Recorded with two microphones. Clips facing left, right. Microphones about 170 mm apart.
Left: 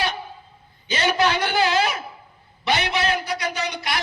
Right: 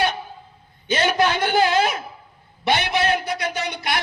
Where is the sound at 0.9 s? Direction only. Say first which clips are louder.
Right 1 dB; 50° right (ahead or behind).